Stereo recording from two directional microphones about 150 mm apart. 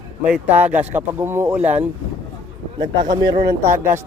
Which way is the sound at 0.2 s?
10° right (ahead or behind).